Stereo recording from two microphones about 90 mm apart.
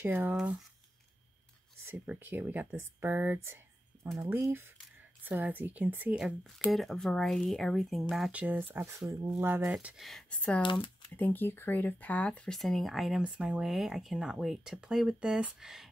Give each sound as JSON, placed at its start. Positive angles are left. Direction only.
{"t": 0.0, "sound": "speech", "side_deg": -20}
{"t": 2.0, "sound": "speech", "side_deg": -20}
{"t": 6.1, "sound": "speech", "side_deg": -5}
{"t": 8.3, "sound": "speech", "side_deg": -15}
{"t": 9.7, "sound": "speech", "side_deg": -15}
{"t": 9.9, "sound": "speech", "side_deg": 0}
{"t": 10.3, "sound": "speech", "side_deg": 15}
{"t": 10.6, "sound": "speech", "side_deg": 65}
{"t": 11.1, "sound": "speech", "side_deg": 20}